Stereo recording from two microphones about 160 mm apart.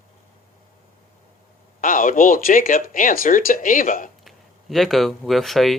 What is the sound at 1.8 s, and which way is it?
Speech, 60° left (ahead or behind).